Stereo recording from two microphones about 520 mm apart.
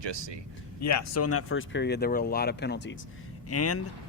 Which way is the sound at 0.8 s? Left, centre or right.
Left.